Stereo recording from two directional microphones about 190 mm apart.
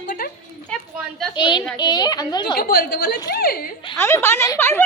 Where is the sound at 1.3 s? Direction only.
25° left (ahead or behind).